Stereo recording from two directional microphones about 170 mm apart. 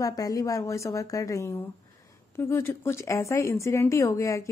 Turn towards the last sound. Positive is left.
turn(degrees=20)  # may be behind; listen again after turning